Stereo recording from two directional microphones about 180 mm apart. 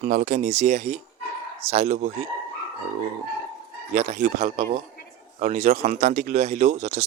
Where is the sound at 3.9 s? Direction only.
40° right (ahead or behind).